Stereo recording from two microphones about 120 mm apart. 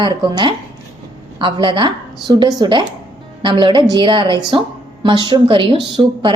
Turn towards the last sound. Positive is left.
turn(degrees=-30)  # may be behind; listen again after turning